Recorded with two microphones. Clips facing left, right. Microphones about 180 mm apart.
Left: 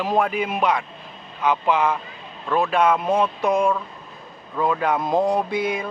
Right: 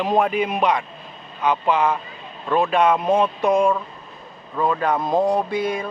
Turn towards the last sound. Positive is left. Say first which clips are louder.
# right 1 dB
turn(degrees=5)  # may be behind; listen again after turning